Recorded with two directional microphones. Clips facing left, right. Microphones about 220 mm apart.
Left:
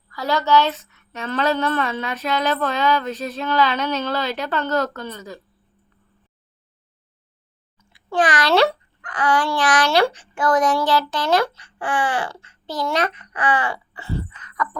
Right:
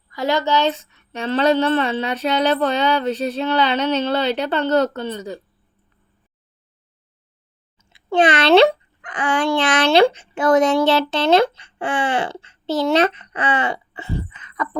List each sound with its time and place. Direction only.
0.1 s speech: 20° right (ahead or behind)
7.9 s a child's voice: 25° right (ahead or behind)